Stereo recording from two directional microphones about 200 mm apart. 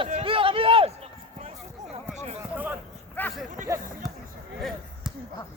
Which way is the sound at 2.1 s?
30° right (ahead or behind).